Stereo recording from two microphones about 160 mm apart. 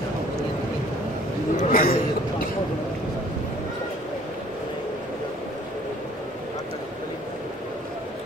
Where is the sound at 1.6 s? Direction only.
60° left (ahead or behind).